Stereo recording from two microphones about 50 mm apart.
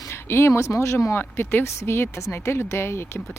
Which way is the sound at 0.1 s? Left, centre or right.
Left.